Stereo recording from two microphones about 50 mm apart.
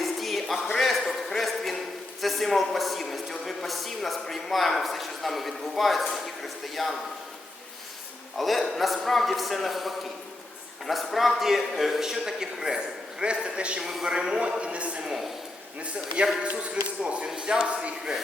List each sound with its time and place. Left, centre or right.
0.0 s music: centre
2.2 s a man's voice: centre
8.4 s a man's voice: centre; by 13.8 s right
13.8 s a man's voice: centre
17.2 s a man's voice: centre